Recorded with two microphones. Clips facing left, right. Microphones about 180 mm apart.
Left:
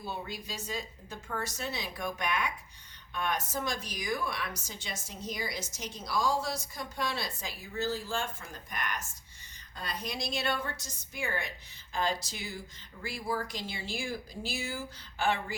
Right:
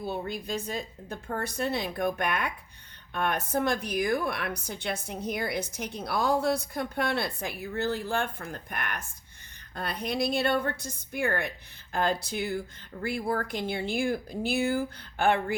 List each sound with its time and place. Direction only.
0.0 s speech: 55° right (ahead or behind)